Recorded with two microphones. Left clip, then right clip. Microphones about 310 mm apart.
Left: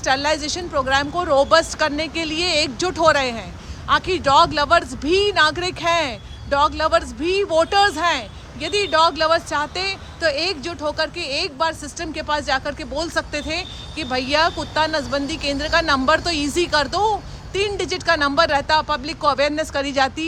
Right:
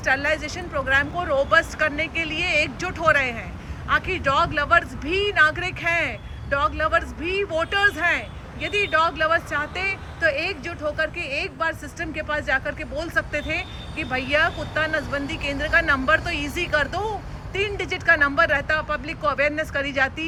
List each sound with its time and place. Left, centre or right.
0.0 s speech: centre
13.6 s speech: left
14.1 s speech: centre